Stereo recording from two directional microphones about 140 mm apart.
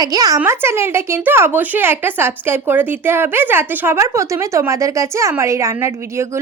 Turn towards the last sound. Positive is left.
turn(degrees=-20)  # may be behind; listen again after turning